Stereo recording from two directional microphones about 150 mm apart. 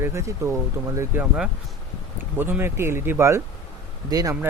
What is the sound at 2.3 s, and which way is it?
Speech, 15° right (ahead or behind).